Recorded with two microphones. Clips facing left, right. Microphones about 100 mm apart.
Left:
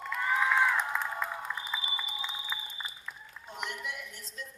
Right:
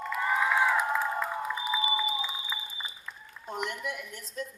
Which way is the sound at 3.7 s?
50° right (ahead or behind).